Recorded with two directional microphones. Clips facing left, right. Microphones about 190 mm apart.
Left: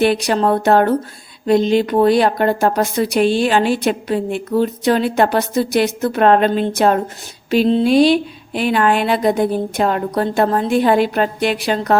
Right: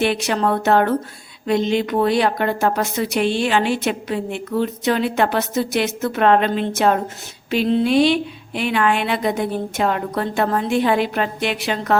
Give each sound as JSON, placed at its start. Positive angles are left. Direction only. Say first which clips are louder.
{"t": 0.0, "sound": "speech", "louder": "left 4 dB", "side_deg": 35}